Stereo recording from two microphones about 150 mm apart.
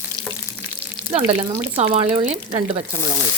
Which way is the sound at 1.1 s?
45° right (ahead or behind).